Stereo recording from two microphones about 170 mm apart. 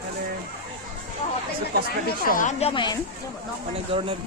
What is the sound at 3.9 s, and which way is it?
Speech, 30° right (ahead or behind).